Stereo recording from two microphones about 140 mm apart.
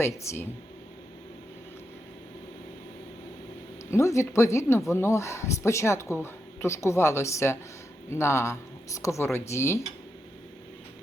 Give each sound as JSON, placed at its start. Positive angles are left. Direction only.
{"t": 0.0, "sound": "speech", "side_deg": 20}
{"t": 3.9, "sound": "speech", "side_deg": 20}